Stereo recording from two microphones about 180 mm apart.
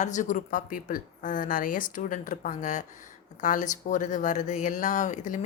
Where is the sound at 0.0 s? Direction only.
45° left (ahead or behind).